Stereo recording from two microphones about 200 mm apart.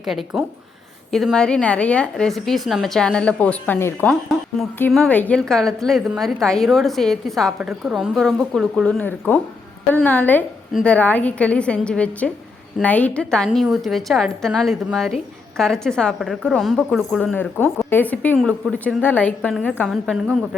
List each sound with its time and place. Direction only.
0.0 s a woman's voice: centre (ahead or behind)